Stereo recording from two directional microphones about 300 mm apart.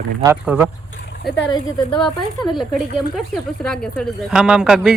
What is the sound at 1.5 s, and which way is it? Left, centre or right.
A woman's voice, centre.